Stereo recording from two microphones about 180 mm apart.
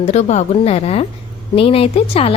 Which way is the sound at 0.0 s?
35° left (ahead or behind).